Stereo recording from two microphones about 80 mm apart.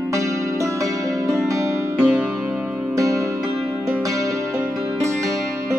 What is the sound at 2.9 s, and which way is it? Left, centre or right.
Music, right.